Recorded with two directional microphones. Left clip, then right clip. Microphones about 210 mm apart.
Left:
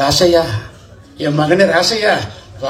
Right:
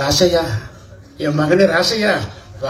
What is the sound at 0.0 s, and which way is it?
A man's voice, 30° left (ahead or behind).